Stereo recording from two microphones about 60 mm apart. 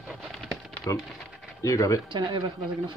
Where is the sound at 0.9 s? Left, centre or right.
Left.